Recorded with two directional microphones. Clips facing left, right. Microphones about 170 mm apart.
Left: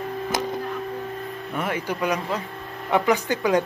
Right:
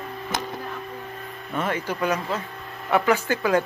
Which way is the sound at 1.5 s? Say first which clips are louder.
Right 1 dB; 10° left (ahead or behind).